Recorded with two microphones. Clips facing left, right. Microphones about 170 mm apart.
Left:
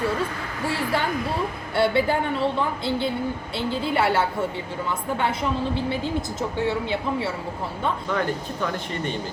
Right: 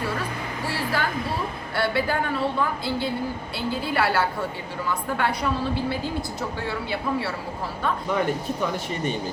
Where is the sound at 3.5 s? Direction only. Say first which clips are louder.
Left 2 dB; 25° left (ahead or behind).